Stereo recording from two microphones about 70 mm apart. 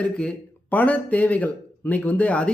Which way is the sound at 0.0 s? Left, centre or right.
Centre.